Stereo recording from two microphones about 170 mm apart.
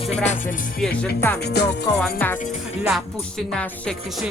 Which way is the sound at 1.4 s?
75° left (ahead or behind).